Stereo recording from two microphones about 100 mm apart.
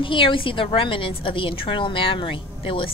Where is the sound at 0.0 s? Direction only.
60° left (ahead or behind).